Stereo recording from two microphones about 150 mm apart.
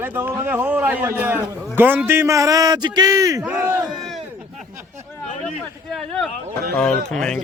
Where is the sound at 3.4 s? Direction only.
10° right (ahead or behind).